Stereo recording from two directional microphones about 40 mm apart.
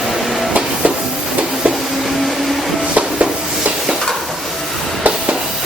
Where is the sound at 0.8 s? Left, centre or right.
Right.